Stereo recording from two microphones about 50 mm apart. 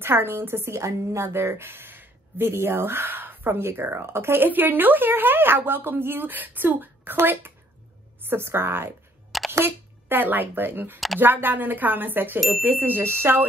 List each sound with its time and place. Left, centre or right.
0.0 s speech: right
0.7 s a woman's voice: right
9.3 s single-lens reflex camera: centre
9.7 s speech: right
12.5 s speech: right
13.0 s speech: right